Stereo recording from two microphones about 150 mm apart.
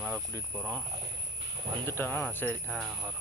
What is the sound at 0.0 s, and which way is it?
Cricket, centre (ahead or behind).